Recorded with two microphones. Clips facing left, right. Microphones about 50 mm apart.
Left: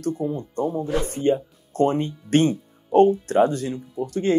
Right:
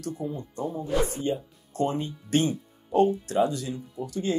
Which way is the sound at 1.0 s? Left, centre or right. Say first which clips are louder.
Left 7 dB; left.